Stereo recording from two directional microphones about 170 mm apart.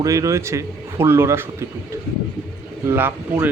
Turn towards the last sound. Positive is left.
turn(degrees=-10)  # may be behind; listen again after turning